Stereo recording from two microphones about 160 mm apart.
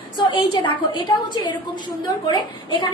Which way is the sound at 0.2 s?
30° left (ahead or behind).